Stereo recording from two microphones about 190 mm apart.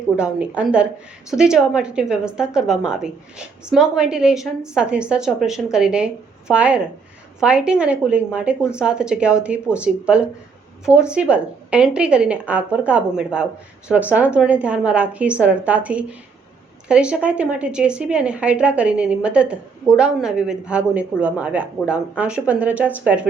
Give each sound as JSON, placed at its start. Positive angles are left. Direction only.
{"t": 0.2, "sound": "a woman's voice", "side_deg": -5}